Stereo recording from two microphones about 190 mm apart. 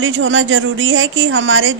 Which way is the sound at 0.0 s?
90° right.